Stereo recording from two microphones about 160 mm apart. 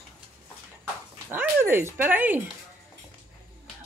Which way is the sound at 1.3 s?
15° right (ahead or behind).